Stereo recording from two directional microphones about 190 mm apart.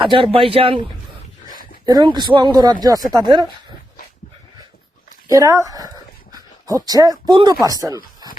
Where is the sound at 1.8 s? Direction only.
20° right (ahead or behind).